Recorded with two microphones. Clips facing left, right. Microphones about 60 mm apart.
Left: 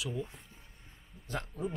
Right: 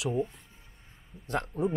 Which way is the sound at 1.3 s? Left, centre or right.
Right.